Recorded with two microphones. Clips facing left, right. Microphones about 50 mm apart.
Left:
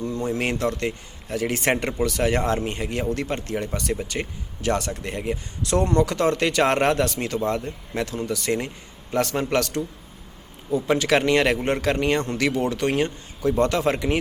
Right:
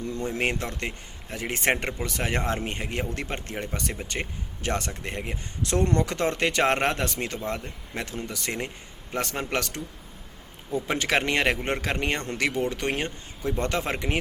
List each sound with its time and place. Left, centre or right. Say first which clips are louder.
0.0 s speech: left 4 dB; left
0.3 s speech: left 4 dB; right
8.5 s a man's voice: left 7 dB; centre
9.1 s speech: left 6 dB; right
10.8 s speech: left 5 dB; right